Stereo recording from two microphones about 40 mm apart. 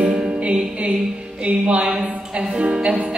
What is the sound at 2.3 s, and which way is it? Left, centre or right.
Music, right.